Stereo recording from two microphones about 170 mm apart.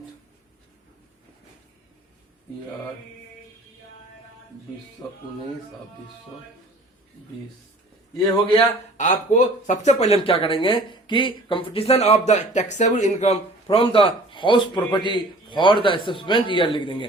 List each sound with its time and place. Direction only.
8.5 s speech: 45° left (ahead or behind); by 17.1 s 30° left (ahead or behind)